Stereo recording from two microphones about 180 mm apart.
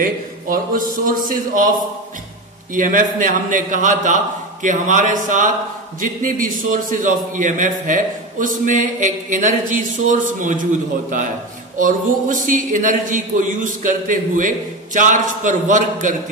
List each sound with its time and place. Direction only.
0.0 s a man's voice: 50° right (ahead or behind)
2.7 s a man's voice: 50° right (ahead or behind)